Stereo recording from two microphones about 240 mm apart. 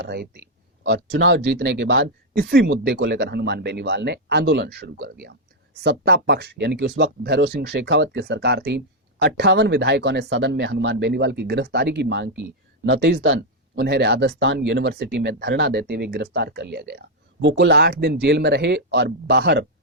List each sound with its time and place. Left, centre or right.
0.0 s speech: right